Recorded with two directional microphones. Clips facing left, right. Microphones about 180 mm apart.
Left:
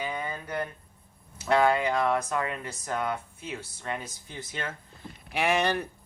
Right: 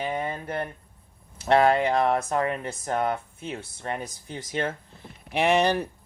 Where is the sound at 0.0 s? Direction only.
30° right (ahead or behind).